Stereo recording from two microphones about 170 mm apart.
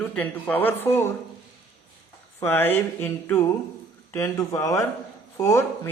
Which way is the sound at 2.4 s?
10° left (ahead or behind).